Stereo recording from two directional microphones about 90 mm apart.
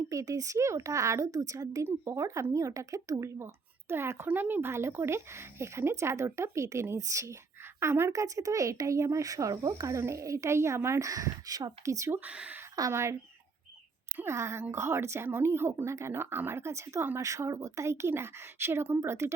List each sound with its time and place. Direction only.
0.1 s speech: 40° right (ahead or behind)
12.1 s speech: 15° right (ahead or behind)
12.9 s speech: 30° right (ahead or behind)
14.3 s speech: 30° right (ahead or behind)